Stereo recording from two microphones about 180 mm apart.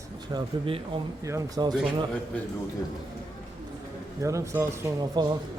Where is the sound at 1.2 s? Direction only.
20° right (ahead or behind).